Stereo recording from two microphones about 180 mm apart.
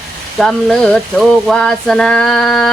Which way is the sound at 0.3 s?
Centre (ahead or behind).